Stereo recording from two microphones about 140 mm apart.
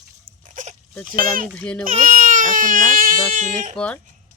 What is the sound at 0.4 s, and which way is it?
Dog, 65° right (ahead or behind).